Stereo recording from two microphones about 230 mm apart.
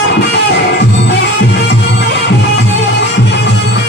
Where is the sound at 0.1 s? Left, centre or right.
Left.